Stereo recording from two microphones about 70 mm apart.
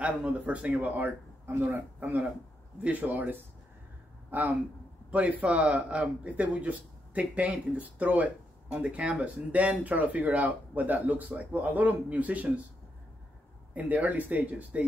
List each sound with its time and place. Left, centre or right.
0.0 s speech: centre
13.7 s speech: right